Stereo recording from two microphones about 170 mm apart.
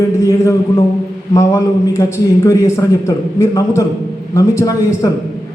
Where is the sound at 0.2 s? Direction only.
20° left (ahead or behind).